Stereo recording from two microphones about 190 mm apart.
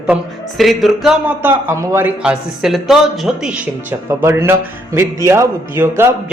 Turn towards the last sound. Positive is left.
turn(degrees=-15)  # may be behind; listen again after turning